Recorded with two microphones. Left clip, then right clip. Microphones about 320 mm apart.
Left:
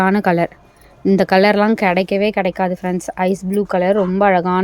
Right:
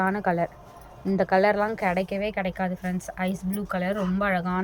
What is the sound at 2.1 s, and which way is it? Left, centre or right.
Speech, centre.